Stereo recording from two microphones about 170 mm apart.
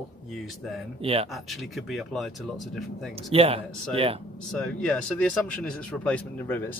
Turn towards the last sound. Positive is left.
turn(degrees=10)  # may be behind; listen again after turning